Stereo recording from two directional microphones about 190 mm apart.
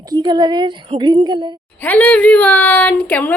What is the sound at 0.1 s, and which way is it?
A woman's voice, 20° right (ahead or behind).